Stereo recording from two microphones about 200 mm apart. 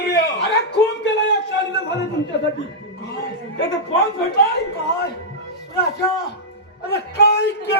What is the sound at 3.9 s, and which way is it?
Speech, 50° left (ahead or behind).